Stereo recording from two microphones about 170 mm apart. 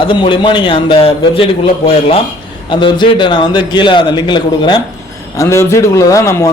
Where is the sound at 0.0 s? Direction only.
30° left (ahead or behind).